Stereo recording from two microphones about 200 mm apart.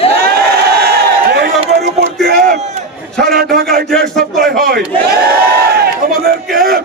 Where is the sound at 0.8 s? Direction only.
55° right (ahead or behind); by 2.8 s 35° right (ahead or behind).